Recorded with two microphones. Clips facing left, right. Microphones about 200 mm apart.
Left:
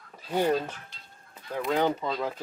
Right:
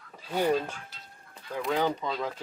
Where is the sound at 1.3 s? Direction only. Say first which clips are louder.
Left 2 dB; 5° left (ahead or behind).